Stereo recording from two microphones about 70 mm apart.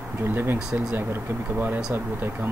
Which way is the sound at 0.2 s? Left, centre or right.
Right.